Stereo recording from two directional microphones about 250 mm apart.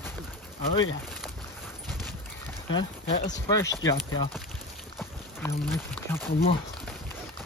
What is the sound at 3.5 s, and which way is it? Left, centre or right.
Speech, centre.